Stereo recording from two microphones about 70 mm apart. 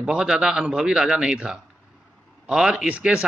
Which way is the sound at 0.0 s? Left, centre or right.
Centre.